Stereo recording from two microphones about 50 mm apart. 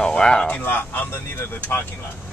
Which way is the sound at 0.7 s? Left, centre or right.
Left.